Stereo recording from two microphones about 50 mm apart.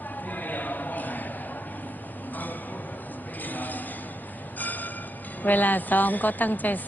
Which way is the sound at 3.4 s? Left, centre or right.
Left.